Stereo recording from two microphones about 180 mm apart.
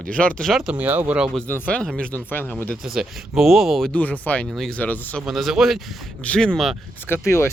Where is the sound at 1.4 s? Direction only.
10° left (ahead or behind).